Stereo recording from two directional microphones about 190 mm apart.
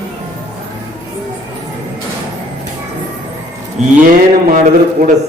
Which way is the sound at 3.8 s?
35° right (ahead or behind).